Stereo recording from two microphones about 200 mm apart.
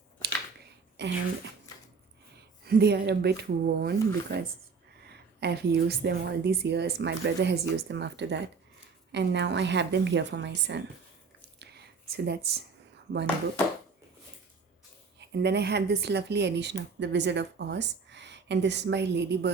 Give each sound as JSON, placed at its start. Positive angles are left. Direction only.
{"t": 1.0, "sound": "speech", "side_deg": -60}
{"t": 2.6, "sound": "speech", "side_deg": -55}
{"t": 11.6, "sound": "a sound", "side_deg": -55}
{"t": 15.3, "sound": "speech", "side_deg": -60}